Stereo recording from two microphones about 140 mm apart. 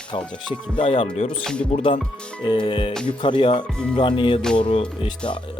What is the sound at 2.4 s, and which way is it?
Speech, 35° left (ahead or behind).